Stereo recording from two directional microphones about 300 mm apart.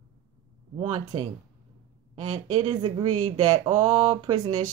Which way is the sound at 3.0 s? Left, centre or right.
Right.